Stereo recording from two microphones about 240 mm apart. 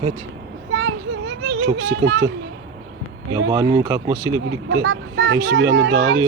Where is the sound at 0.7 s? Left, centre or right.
Right.